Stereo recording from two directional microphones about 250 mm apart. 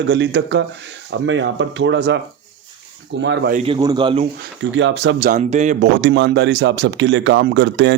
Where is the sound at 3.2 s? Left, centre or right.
Right.